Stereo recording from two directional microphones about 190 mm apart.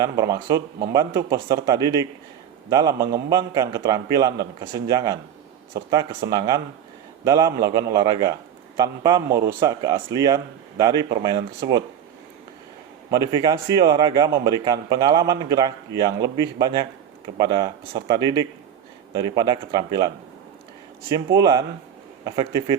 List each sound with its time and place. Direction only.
0.0 s speech: 20° right (ahead or behind)
13.1 s speech: 15° right (ahead or behind)
21.3 s speech: 20° right (ahead or behind)